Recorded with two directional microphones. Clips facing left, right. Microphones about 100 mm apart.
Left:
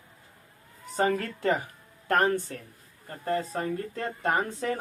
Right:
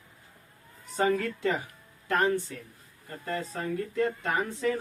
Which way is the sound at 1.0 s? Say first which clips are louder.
Even; 45° left (ahead or behind).